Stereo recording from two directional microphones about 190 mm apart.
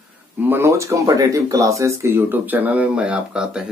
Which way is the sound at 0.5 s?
15° right (ahead or behind).